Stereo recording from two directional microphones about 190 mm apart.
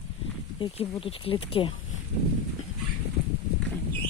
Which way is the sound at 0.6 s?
25° left (ahead or behind).